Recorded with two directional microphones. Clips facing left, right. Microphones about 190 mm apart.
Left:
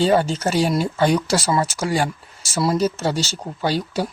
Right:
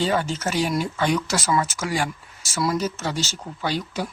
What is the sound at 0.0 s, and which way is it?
Speech, 30° left (ahead or behind).